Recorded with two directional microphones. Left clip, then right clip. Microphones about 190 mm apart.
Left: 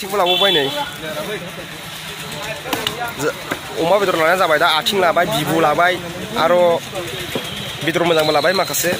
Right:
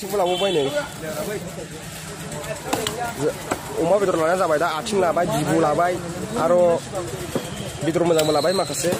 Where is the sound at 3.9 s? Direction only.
5° left (ahead or behind).